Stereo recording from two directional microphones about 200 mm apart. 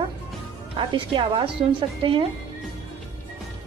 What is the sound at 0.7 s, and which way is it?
Speech, 25° right (ahead or behind).